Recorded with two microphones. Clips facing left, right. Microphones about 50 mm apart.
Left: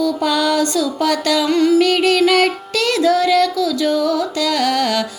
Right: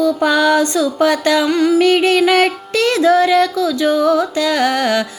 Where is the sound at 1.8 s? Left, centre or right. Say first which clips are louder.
Right 2 dB; right.